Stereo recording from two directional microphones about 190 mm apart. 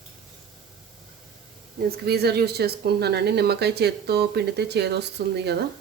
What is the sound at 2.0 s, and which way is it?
Speech, 55° right (ahead or behind).